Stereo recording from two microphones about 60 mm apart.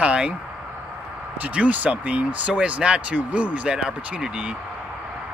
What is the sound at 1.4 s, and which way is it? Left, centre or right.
Speech, right.